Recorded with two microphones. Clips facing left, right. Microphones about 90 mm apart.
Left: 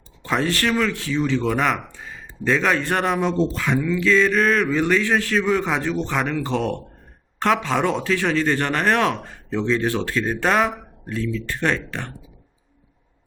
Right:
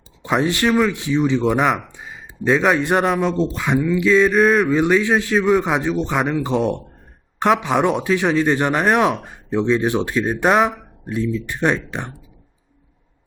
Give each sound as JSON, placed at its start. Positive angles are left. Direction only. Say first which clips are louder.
{"t": 0.2, "sound": "speech", "louder": "right 3 dB", "side_deg": -15}
{"t": 3.5, "sound": "speech", "louder": "right 3 dB", "side_deg": -15}
{"t": 10.7, "sound": "a sound", "louder": "right 1 dB", "side_deg": -5}
{"t": 11.1, "sound": "speech", "louder": "right 3 dB", "side_deg": -15}